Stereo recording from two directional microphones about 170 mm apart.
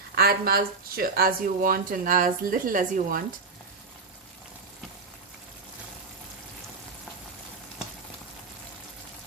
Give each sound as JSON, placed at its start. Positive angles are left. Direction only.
{"t": 0.2, "sound": "speech", "side_deg": -65}